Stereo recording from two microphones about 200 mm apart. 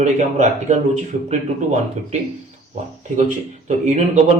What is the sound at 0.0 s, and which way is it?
Speech, 35° right (ahead or behind).